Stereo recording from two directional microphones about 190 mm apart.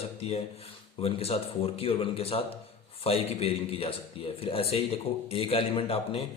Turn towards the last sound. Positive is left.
turn(degrees=30)  # may be behind; listen again after turning